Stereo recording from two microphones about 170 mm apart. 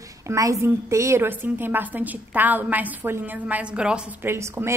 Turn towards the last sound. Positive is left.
turn(degrees=-15)  # may be behind; listen again after turning